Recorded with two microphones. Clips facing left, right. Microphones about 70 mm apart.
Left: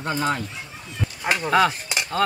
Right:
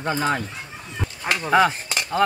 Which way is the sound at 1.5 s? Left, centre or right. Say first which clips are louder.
Right 2 dB; centre.